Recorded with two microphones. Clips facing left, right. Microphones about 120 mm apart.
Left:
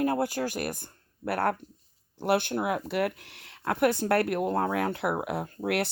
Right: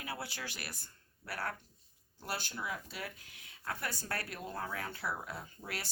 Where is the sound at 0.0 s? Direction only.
45° left (ahead or behind).